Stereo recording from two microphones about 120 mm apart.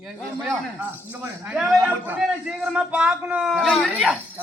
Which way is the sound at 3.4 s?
Centre (ahead or behind).